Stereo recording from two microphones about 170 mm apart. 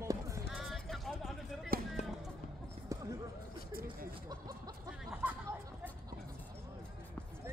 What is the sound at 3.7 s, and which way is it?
Speech, 60° right (ahead or behind).